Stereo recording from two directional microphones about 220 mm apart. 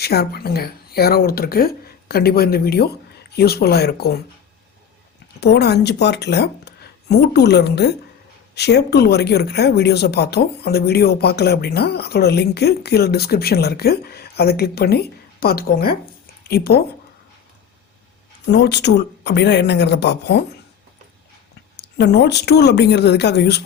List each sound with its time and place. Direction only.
0.0 s speech: 45° left (ahead or behind)
5.4 s speech: 45° left (ahead or behind)
18.5 s speech: 50° left (ahead or behind)
21.8 s speech: 50° left (ahead or behind)